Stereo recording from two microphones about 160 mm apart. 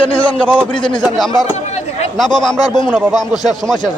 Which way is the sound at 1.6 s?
45° left (ahead or behind).